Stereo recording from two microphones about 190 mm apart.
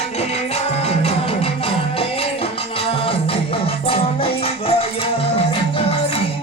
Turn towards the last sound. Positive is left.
turn(degrees=30)  # may be behind; listen again after turning